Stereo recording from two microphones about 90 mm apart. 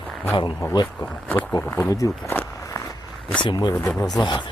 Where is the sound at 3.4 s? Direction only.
55° left (ahead or behind).